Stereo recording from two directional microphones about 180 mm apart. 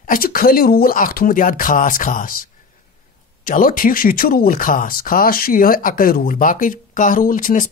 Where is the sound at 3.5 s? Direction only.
50° left (ahead or behind).